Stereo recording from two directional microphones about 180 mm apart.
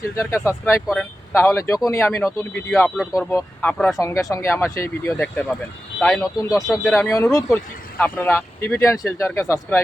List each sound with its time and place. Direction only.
0.2 s speech: 15° left (ahead or behind)
2.8 s speech: centre (ahead or behind)
3.2 s speech: 10° left (ahead or behind)
3.9 s speech: 15° left (ahead or behind); by 6.9 s centre (ahead or behind)
6.9 s speech: 15° left (ahead or behind)